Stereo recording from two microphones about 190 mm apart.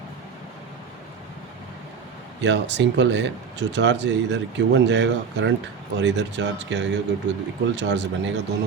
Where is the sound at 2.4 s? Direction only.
65° right (ahead or behind).